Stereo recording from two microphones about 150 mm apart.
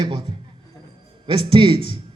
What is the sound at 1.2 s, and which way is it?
Speech, 35° right (ahead or behind).